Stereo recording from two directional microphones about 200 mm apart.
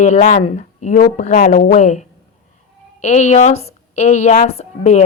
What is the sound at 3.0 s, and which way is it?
A woman's voice, 35° left (ahead or behind).